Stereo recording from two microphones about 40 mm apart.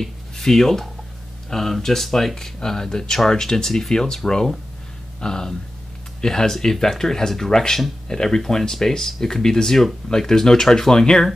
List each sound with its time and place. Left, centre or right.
0.0 s speech: centre